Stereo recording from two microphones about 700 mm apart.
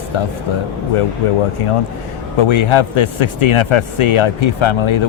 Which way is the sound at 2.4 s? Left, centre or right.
Left.